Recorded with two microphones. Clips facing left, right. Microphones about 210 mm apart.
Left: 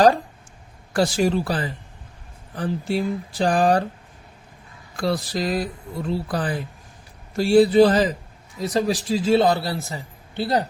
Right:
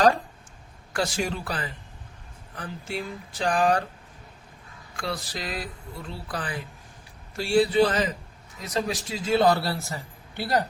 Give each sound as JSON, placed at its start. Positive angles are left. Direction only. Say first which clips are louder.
{"t": 0.9, "sound": "speech", "louder": "left 8 dB", "side_deg": 35}
{"t": 4.9, "sound": "a man's voice", "louder": "left 9 dB", "side_deg": 35}